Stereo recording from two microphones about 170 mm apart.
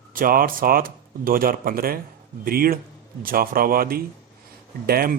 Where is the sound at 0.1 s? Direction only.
55° right (ahead or behind).